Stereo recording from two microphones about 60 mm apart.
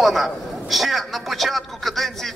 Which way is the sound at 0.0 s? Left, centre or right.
Centre.